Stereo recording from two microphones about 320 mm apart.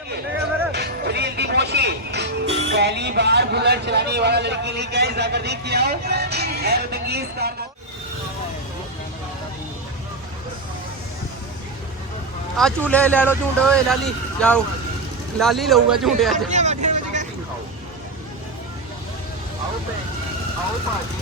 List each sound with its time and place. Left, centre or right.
0.7 s speech: right
12.5 s speech: centre
16.5 s vehicle: right